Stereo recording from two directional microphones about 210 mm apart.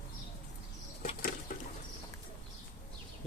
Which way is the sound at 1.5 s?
40° left (ahead or behind).